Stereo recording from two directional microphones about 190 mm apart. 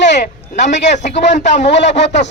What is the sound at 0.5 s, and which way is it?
Speech, 40° left (ahead or behind).